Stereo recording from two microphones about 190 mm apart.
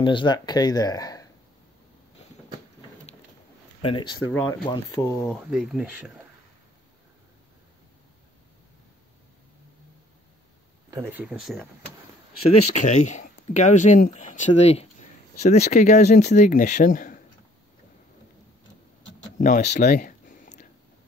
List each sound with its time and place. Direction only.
0.0 s speech: 25° left (ahead or behind)
3.8 s speech: 25° left (ahead or behind)
5.2 s speech: centre (ahead or behind)
10.9 s speech: 10° right (ahead or behind)
12.4 s speech: 40° left (ahead or behind)
19.3 s speech: 40° left (ahead or behind)
19.8 s a sound: 45° left (ahead or behind)